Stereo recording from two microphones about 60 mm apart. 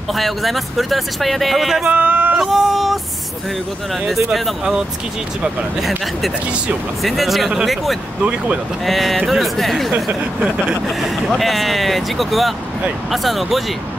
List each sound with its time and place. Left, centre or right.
0.1 s speech: centre
1.9 s a sound: right
2.3 s music: centre
4.1 s speech: centre
8.2 s speech: centre
8.8 s speech: centre